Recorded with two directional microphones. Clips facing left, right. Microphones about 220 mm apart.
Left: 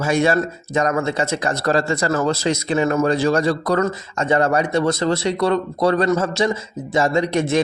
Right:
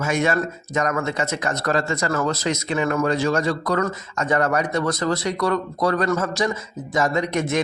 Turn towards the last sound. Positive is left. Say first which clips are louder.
# left 4 dB
turn(degrees=30)  # may be behind; listen again after turning